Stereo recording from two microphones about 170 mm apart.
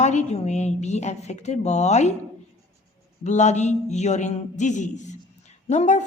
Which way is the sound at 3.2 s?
45° left (ahead or behind).